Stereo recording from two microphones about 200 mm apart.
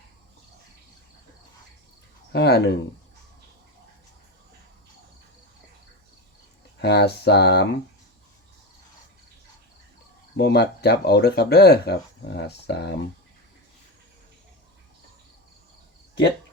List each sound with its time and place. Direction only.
2.3 s speech: 55° left (ahead or behind)
6.8 s speech: 55° left (ahead or behind)
10.3 s speech: 55° left (ahead or behind)